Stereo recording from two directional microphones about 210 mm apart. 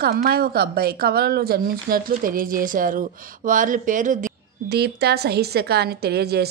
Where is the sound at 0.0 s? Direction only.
45° right (ahead or behind).